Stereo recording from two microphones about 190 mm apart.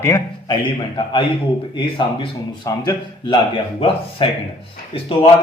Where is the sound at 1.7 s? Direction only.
25° left (ahead or behind).